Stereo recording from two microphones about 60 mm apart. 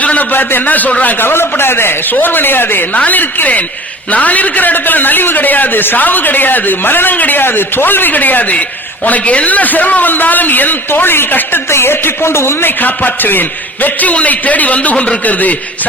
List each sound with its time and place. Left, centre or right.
0.0 s a man's voice: left
1.2 s a man's voice: left